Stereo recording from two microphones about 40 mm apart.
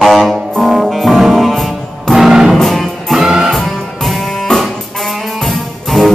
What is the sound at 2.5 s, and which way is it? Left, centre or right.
Music, centre.